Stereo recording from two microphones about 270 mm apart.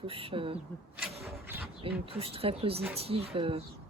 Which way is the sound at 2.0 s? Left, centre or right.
Right.